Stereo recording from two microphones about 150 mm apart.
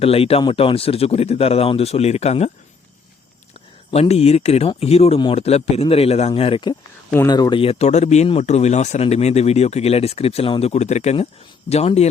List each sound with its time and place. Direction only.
0.0 s a man's voice: 40° left (ahead or behind)
3.9 s a man's voice: 45° left (ahead or behind)